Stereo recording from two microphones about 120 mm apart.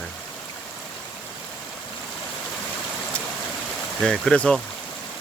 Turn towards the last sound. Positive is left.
turn(degrees=5)  # may be behind; listen again after turning